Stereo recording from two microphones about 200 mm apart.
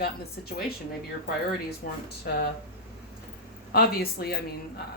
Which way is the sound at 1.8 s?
50° left (ahead or behind).